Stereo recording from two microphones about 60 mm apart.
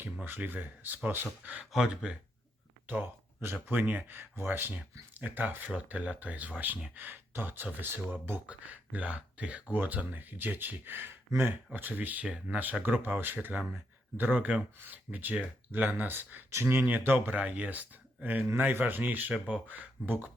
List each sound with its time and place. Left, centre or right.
0.3 s speech: right
2.0 s speech: centre
2.8 s speech: right
12.2 s speech: centre
12.8 s speech: right
16.5 s speech: right
17.3 s speech: right